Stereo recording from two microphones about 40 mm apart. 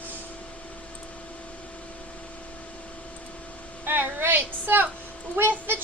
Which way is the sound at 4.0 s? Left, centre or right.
Right.